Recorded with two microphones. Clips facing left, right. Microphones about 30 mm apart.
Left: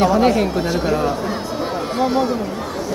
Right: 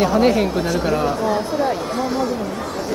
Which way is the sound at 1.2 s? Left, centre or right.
Centre.